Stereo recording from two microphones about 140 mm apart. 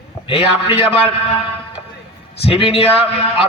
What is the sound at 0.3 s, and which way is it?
Speech, 45° left (ahead or behind).